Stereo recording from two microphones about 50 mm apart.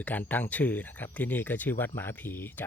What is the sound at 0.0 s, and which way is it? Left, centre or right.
Speech, left.